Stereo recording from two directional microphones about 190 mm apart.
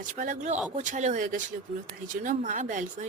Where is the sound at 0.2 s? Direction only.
40° right (ahead or behind).